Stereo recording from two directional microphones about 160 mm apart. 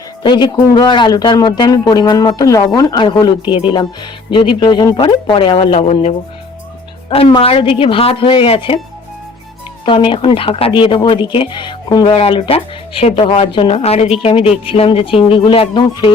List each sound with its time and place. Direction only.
0.2 s speech: 30° left (ahead or behind)
9.8 s speech: 30° left (ahead or behind)